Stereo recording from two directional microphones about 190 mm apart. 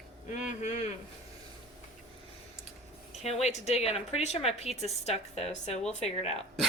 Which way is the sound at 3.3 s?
35° left (ahead or behind).